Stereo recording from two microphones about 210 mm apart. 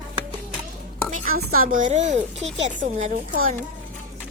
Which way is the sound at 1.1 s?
40° right (ahead or behind).